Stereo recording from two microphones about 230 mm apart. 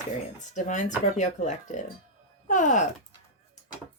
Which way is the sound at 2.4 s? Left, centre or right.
Left.